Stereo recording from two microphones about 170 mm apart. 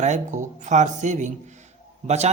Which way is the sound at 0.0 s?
45° right (ahead or behind).